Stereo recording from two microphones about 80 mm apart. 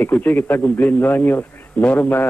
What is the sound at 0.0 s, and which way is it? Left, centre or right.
A man's voice, left.